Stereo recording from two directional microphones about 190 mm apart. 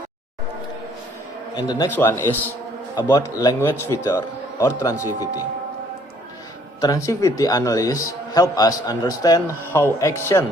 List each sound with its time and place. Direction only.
1.5 s a man's voice: 20° left (ahead or behind)
6.8 s a man's voice: 15° left (ahead or behind)